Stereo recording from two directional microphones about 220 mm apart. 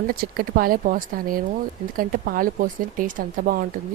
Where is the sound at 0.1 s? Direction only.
45° right (ahead or behind).